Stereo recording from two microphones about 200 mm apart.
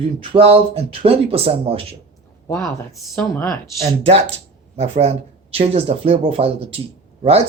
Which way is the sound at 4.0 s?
30° right (ahead or behind).